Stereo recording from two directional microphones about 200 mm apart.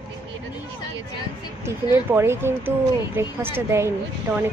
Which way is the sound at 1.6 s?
15° right (ahead or behind).